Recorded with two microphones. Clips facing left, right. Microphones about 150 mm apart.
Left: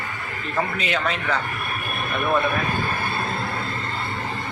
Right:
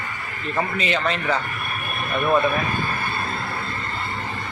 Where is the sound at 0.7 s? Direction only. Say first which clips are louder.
Right 2 dB; centre (ahead or behind).